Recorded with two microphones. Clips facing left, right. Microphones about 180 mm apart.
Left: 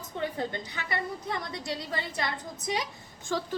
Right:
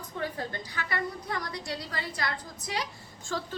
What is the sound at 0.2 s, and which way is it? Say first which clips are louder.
A woman's voice: left 2 dB; 20° left (ahead or behind).